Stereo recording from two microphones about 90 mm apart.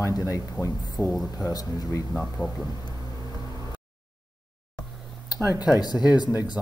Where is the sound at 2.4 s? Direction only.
15° left (ahead or behind).